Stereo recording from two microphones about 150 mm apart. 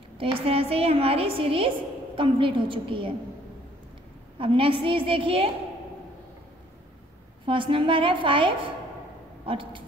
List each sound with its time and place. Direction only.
0.2 s a woman's voice: 40° right (ahead or behind)
4.4 s a woman's voice: 35° right (ahead or behind)
7.4 s a woman's voice: 35° right (ahead or behind)